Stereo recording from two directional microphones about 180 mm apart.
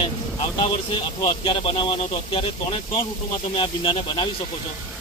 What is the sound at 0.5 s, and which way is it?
Speech, 30° left (ahead or behind).